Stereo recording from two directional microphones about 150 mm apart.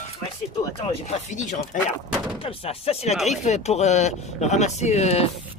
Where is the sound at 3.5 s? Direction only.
45° left (ahead or behind).